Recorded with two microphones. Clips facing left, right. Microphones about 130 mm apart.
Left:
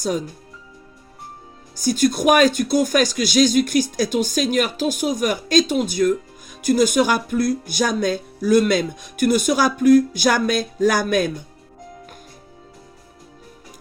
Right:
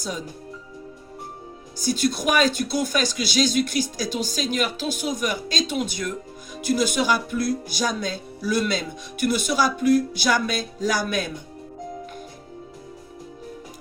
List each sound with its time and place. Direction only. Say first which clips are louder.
1.8 s speech: left 5 dB; 50° left (ahead or behind)